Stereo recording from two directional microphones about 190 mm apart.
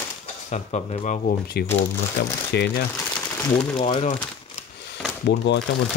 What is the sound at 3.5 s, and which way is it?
Speech, 25° left (ahead or behind).